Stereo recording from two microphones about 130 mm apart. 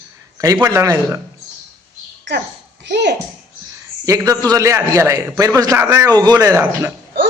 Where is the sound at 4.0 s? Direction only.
25° right (ahead or behind).